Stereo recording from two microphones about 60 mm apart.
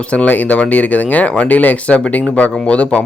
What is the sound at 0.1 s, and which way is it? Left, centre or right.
Speech, left.